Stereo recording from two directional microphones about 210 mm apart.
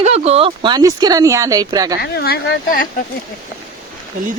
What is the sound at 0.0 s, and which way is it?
Speech, 30° right (ahead or behind).